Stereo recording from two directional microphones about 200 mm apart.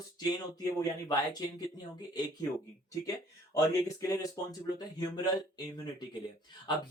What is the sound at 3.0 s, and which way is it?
Speech, 15° left (ahead or behind).